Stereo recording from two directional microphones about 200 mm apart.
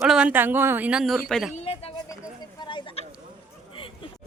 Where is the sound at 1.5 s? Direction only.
30° left (ahead or behind).